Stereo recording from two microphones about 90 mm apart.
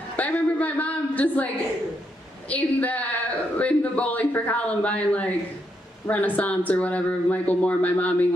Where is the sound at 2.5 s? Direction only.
15° left (ahead or behind).